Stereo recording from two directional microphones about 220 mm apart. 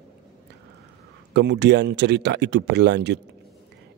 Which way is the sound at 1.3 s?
50° right (ahead or behind).